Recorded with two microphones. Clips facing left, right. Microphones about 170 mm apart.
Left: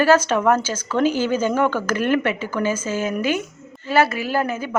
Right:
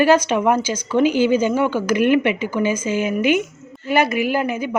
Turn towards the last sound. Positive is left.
turn(degrees=-15)  # may be behind; listen again after turning